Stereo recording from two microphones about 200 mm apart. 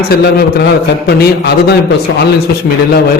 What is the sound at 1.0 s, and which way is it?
Speech, 55° left (ahead or behind).